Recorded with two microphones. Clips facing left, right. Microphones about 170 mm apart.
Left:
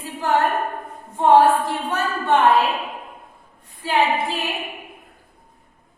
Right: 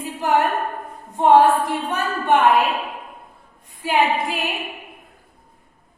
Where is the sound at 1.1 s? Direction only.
15° right (ahead or behind).